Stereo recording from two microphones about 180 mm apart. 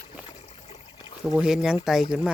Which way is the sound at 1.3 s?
5° right (ahead or behind).